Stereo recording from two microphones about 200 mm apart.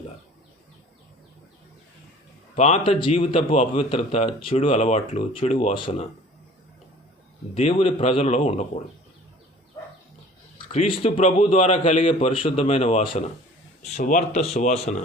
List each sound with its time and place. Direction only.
2.6 s a man's voice: 35° left (ahead or behind)
7.5 s a man's voice: 30° left (ahead or behind)
10.7 s a man's voice: 25° left (ahead or behind)